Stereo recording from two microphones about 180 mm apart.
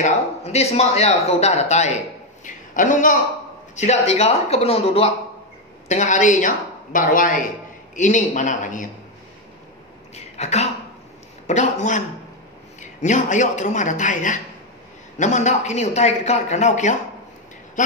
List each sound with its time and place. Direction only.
0.0 s a woman's voice: 35° left (ahead or behind)
10.1 s speech: 40° left (ahead or behind)
13.0 s a woman's voice: 45° left (ahead or behind)